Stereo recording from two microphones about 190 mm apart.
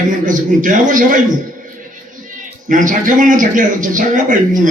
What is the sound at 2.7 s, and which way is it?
Speech, 45° right (ahead or behind).